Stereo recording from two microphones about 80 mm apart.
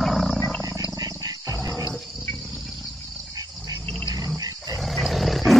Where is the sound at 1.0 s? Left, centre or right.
Right.